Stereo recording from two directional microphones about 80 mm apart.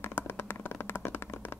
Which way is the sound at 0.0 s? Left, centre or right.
Left.